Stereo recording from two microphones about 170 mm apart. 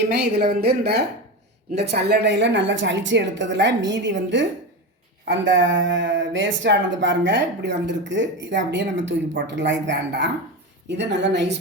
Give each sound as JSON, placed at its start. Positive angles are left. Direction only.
{"t": 0.1, "sound": "a woman's voice", "side_deg": -70}